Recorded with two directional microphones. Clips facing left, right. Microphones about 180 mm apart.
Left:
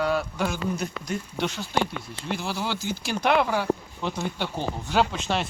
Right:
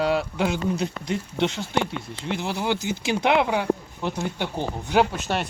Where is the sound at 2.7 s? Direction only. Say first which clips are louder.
Right 4 dB; 60° right (ahead or behind).